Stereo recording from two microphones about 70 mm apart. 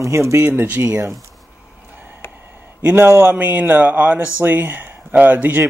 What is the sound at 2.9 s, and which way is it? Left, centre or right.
Speech, right.